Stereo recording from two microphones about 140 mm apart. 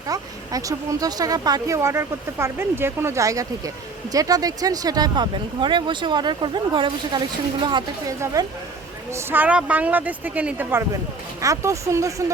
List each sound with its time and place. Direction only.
0.1 s speech: 25° right (ahead or behind)
8.2 s speech: 25° right (ahead or behind)
9.1 s speech: 15° right (ahead or behind)